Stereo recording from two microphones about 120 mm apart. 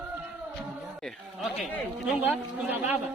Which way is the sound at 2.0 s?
15° right (ahead or behind).